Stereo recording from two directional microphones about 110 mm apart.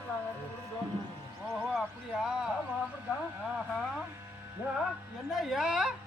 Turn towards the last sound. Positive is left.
turn(degrees=-5)  # may be behind; listen again after turning